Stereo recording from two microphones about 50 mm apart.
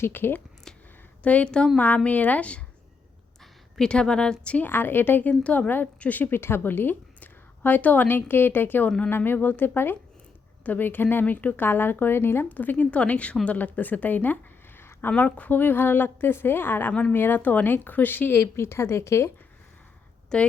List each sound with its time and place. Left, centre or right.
0.0 s speech: left
1.2 s a woman's voice: left
2.0 s a woman's voice: left
3.8 s a woman's voice: centre
4.6 s speech: left
5.3 s a woman's voice: left
5.6 s a woman's voice: left
8.0 s speech: left
12.5 s a woman's voice: left
14.8 s a sound: left
15.1 s a woman's voice: left
18.3 s a woman's voice: left
20.3 s a woman's voice: centre